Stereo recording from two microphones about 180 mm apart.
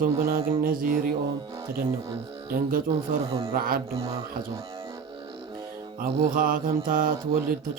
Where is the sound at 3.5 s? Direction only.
55° right (ahead or behind).